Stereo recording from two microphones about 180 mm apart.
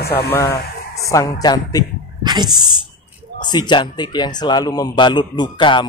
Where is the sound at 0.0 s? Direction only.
60° left (ahead or behind).